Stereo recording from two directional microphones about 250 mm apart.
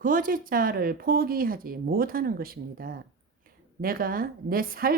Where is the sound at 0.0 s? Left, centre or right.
Right.